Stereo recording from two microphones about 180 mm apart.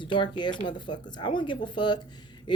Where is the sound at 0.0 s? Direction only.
25° left (ahead or behind).